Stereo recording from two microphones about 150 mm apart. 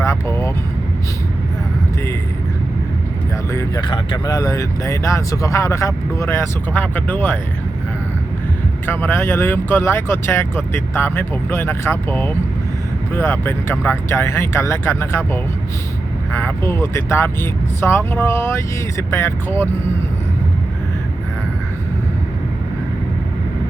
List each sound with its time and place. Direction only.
0.0 s vehicle: 20° left (ahead or behind)
3.5 s vehicle: 20° left (ahead or behind)
3.8 s speech: 30° left (ahead or behind); by 7.3 s 10° left (ahead or behind)
8.9 s speech: 15° left (ahead or behind)